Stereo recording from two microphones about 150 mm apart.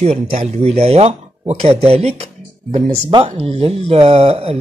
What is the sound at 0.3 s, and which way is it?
Speech, 50° right (ahead or behind).